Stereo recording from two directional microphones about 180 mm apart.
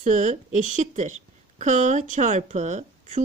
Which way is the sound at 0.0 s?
45° right (ahead or behind).